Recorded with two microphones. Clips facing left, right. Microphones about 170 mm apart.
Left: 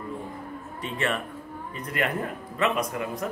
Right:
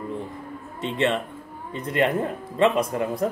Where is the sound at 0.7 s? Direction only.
25° right (ahead or behind).